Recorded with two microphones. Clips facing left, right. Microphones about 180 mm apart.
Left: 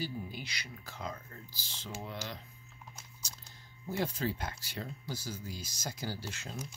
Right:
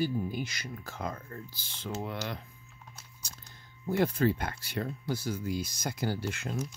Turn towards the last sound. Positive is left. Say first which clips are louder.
# right 8 dB
turn(degrees=-60)  # may be behind; listen again after turning